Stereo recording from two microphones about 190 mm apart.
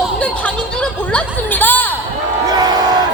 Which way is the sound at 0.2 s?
5° left (ahead or behind).